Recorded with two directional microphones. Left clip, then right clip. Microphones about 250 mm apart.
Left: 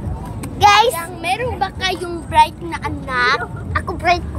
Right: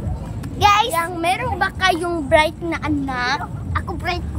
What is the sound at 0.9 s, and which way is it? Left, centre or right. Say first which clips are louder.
A woman's voice: right 1 dB; centre.